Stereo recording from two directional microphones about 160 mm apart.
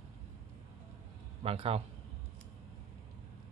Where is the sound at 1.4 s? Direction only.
40° right (ahead or behind).